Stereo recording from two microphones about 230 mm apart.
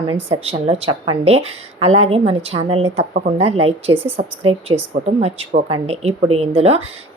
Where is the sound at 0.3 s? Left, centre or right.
Right.